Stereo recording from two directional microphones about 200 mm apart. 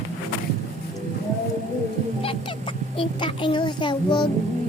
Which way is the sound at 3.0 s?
25° left (ahead or behind).